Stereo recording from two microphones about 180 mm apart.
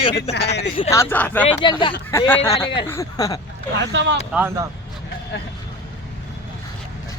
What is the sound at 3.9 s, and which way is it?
Speech, 85° right.